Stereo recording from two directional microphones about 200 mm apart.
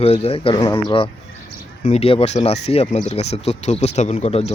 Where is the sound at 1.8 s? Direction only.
30° left (ahead or behind).